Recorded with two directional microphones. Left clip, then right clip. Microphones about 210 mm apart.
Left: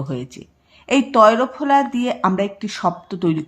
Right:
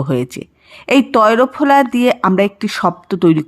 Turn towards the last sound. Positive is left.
turn(degrees=-25)  # may be behind; listen again after turning